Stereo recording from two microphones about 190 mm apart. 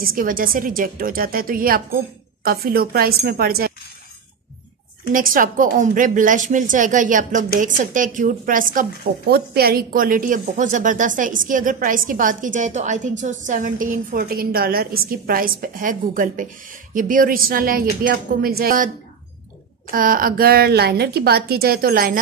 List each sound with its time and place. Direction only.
0.0 s a woman's voice: 50° right (ahead or behind)
5.1 s a woman's voice: 45° right (ahead or behind)
19.9 s a woman's voice: 45° right (ahead or behind)